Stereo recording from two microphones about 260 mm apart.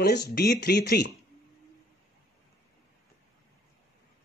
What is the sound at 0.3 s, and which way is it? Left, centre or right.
Speech, left.